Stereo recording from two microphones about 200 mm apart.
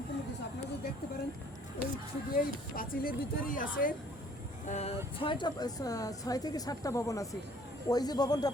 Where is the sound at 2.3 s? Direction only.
45° left (ahead or behind).